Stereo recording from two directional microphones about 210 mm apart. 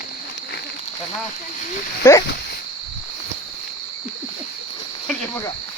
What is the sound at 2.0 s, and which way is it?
Speech, 15° left (ahead or behind).